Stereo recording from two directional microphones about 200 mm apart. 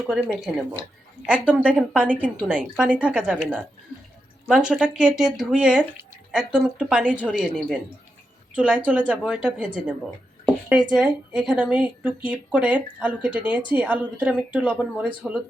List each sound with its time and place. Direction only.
0.1 s speech: 5° right (ahead or behind)
10.4 s a sound: 5° right (ahead or behind)
10.9 s speech: 5° right (ahead or behind)